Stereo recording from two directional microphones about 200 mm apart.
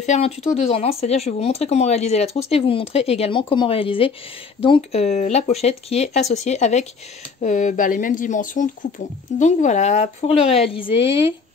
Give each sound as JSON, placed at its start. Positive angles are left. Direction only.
{"t": 0.0, "sound": "speech", "side_deg": 30}